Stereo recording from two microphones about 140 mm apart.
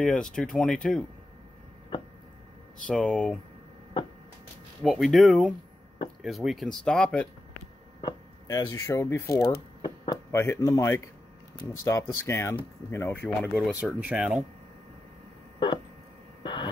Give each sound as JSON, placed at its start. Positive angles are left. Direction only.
{"t": 0.0, "sound": "speech", "side_deg": 5}
{"t": 2.9, "sound": "speech", "side_deg": 5}
{"t": 4.8, "sound": "speech", "side_deg": 0}
{"t": 8.0, "sound": "speech", "side_deg": 25}
{"t": 10.3, "sound": "speech", "side_deg": 15}
{"t": 13.6, "sound": "speech", "side_deg": -5}
{"t": 16.4, "sound": "a sound", "side_deg": 35}